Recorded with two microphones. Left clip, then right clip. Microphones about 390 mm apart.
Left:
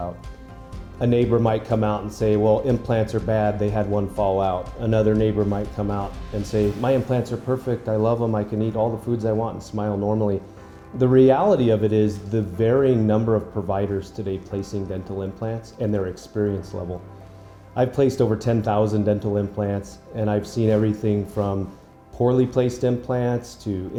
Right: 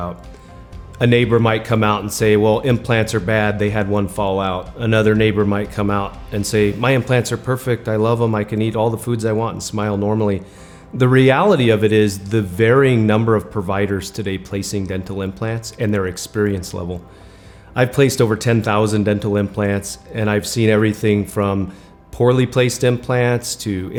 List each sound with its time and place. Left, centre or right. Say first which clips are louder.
0.9 s speech: right 5 dB; right
8.4 s speech: right 4 dB; right
9.7 s speech: right 4 dB; right
10.9 s speech: right 2 dB; right
17.7 s speech: right 5 dB; right